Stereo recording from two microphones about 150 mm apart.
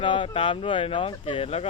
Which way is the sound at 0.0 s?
35° left (ahead or behind).